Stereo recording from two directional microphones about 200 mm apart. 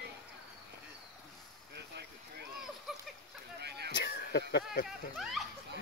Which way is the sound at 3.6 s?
55° right (ahead or behind).